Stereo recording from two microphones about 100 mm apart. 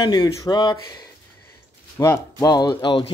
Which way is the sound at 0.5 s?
45° left (ahead or behind).